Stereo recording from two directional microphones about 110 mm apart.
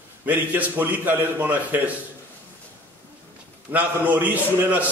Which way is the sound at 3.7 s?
15° right (ahead or behind).